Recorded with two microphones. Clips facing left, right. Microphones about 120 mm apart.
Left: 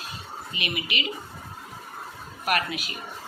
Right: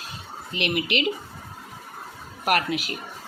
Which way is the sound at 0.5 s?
75° right (ahead or behind).